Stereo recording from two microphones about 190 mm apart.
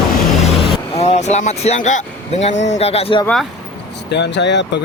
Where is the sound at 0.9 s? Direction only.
35° left (ahead or behind).